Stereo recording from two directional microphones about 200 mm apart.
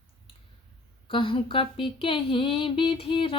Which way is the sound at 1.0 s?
25° left (ahead or behind).